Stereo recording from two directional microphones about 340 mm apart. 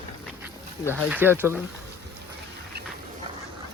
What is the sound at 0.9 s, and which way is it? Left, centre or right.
Speech, centre.